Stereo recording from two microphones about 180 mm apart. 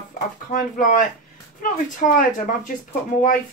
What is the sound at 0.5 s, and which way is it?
Speech, 50° left (ahead or behind).